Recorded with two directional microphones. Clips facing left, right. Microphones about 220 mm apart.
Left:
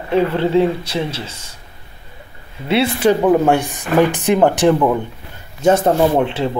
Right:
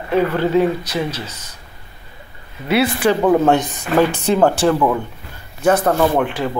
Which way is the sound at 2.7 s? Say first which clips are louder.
Left 1 dB; 25° left (ahead or behind).